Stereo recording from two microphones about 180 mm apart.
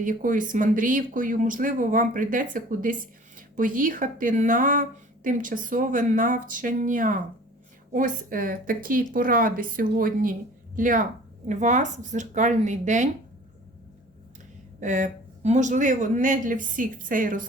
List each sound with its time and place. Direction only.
0.0 s speech: 50° right (ahead or behind)
14.8 s speech: 45° right (ahead or behind)